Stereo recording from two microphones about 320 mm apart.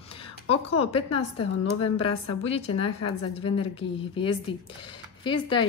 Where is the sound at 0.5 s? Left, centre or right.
Centre.